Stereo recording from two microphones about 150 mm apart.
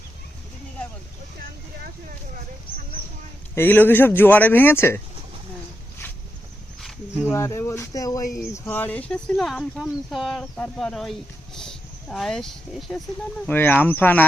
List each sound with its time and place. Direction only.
3.5 s speech: 15° left (ahead or behind)
7.3 s speech: 20° left (ahead or behind)